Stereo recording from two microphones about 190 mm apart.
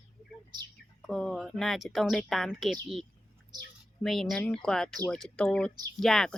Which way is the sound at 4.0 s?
Centre (ahead or behind).